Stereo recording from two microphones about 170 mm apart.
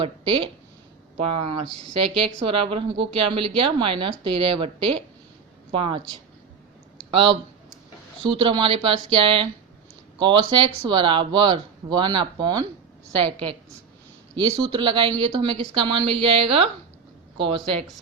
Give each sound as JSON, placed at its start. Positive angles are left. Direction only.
{"t": 0.0, "sound": "speech", "side_deg": -30}
{"t": 7.1, "sound": "speech", "side_deg": -30}